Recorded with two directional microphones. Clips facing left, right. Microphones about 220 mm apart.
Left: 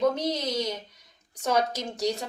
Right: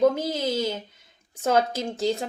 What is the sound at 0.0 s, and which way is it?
A woman's voice, 25° right (ahead or behind).